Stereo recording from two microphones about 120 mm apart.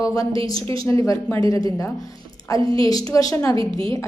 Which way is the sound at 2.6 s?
45° right (ahead or behind).